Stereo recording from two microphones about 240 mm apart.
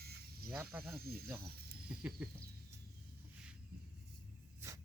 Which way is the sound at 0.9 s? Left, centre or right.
Right.